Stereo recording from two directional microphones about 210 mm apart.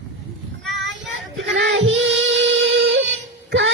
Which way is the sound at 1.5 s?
60° right (ahead or behind).